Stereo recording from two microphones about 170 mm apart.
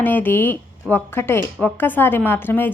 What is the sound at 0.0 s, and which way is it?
A woman's voice, 10° left (ahead or behind).